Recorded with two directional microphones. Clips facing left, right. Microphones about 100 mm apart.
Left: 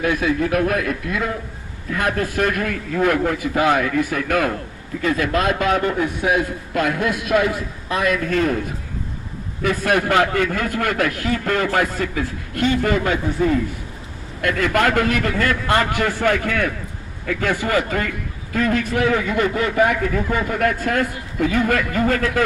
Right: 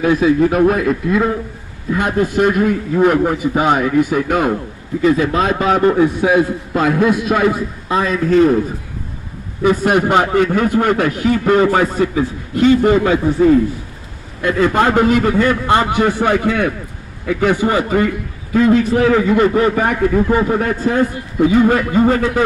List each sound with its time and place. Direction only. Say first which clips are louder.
0.0 s a man's voice: right 7 dB; 35° right (ahead or behind)
9.6 s a man's voice: right 6 dB; 20° right (ahead or behind)
14.4 s a man's voice: right 4 dB; 25° right (ahead or behind)